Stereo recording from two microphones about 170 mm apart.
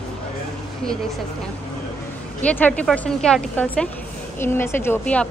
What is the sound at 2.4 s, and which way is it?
A woman's voice, 10° left (ahead or behind).